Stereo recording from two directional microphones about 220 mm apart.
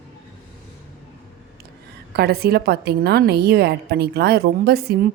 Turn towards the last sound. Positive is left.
turn(degrees=-45)  # may be behind; listen again after turning